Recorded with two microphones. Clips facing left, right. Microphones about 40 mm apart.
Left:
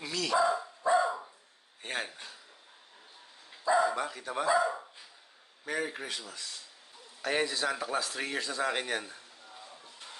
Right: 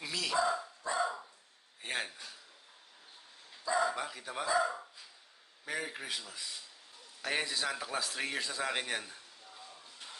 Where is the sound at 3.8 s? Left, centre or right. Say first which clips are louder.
Left 4 dB; centre.